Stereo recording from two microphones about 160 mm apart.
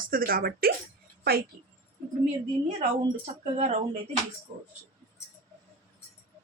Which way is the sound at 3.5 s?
45° right (ahead or behind).